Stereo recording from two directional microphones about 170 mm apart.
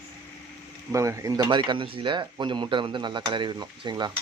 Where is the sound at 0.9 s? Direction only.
20° right (ahead or behind).